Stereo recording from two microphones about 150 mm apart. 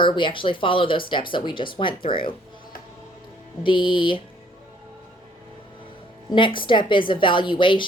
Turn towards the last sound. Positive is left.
turn(degrees=35)  # may be behind; listen again after turning